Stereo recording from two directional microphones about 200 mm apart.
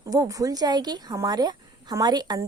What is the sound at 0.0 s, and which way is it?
Speech, 15° right (ahead or behind).